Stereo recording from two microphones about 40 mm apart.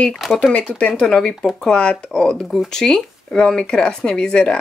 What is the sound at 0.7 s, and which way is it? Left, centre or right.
Speech, left.